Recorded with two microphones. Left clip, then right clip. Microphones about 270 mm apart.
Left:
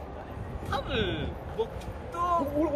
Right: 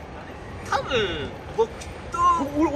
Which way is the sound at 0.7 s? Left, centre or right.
Centre.